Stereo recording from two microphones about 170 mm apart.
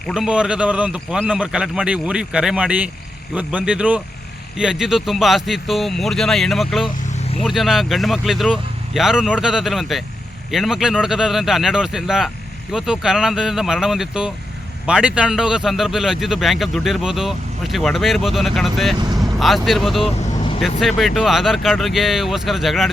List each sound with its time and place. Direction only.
0.1 s speech: 5° right (ahead or behind)
6.8 s vehicle: 35° left (ahead or behind)
7.4 s speech: centre (ahead or behind)
18.9 s vehicle: 20° right (ahead or behind)
19.4 s speech: centre (ahead or behind)